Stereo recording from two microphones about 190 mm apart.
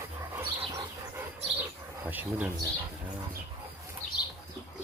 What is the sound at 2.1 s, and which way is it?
Speech, 10° right (ahead or behind).